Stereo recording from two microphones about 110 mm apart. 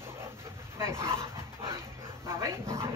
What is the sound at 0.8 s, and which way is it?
Dog, 25° right (ahead or behind).